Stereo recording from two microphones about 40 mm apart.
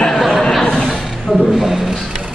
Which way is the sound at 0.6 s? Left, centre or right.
Left.